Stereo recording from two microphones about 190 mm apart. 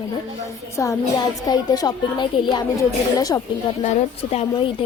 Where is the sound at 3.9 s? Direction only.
35° left (ahead or behind).